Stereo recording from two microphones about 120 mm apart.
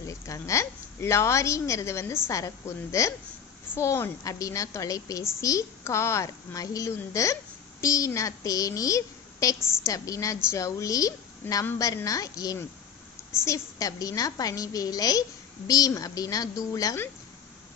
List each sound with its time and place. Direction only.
0.0 s a woman's voice: 25° left (ahead or behind)